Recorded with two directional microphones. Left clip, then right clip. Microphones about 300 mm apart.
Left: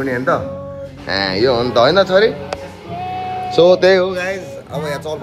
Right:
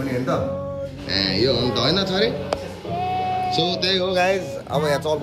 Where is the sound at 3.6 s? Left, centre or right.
Centre.